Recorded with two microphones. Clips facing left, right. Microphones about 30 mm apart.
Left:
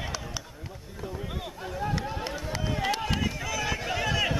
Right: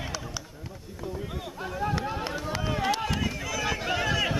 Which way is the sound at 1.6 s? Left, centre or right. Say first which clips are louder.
Right 2 dB; centre.